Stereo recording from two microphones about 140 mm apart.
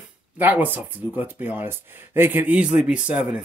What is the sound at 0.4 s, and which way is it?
Speech, 15° right (ahead or behind).